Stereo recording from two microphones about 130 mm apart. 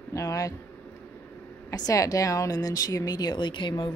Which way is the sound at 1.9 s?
25° left (ahead or behind).